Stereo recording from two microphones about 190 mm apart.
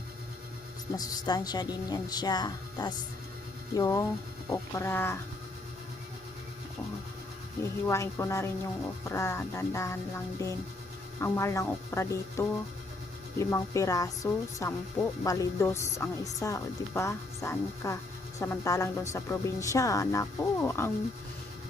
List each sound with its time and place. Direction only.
0.9 s speech: 20° left (ahead or behind)
7.6 s speech: 15° left (ahead or behind)